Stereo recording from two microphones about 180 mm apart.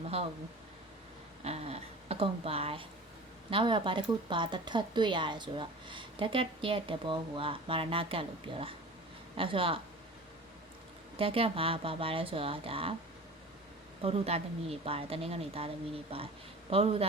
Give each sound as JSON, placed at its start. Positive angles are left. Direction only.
{"t": 1.5, "sound": "a woman's voice", "side_deg": -35}
{"t": 11.2, "sound": "speech", "side_deg": -30}
{"t": 14.0, "sound": "speech", "side_deg": -35}